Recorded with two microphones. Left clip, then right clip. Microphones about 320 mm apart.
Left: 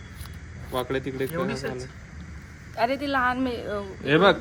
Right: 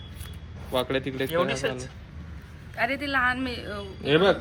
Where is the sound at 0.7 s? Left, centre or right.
Right.